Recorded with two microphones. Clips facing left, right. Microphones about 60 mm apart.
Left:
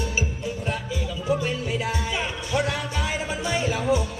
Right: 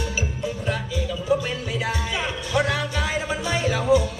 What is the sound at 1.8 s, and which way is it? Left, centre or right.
Music, right.